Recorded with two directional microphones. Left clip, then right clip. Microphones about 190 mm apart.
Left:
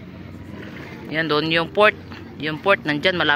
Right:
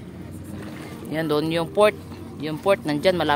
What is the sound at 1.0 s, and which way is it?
Speech, 15° right (ahead or behind).